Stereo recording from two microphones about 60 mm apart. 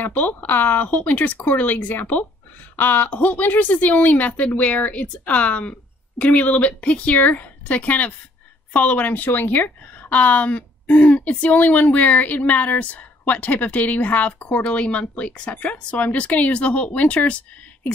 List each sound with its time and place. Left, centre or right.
0.0 s a woman's voice: left